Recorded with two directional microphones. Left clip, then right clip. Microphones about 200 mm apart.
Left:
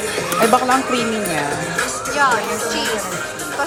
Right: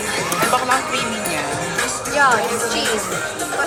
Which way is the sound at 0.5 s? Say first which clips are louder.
Left 2 dB; 50° left (ahead or behind).